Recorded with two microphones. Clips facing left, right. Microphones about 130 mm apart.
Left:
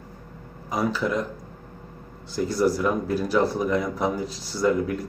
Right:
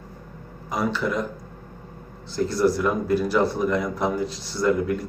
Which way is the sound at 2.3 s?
5° left (ahead or behind).